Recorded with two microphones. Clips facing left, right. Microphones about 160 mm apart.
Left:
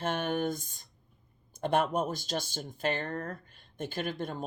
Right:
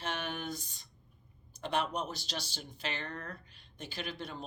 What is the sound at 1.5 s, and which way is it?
Speech, 50° left (ahead or behind).